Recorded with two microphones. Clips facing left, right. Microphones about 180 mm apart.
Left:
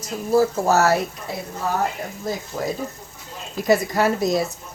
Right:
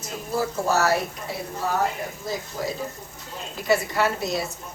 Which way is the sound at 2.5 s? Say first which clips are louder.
Left 3 dB; 55° left (ahead or behind).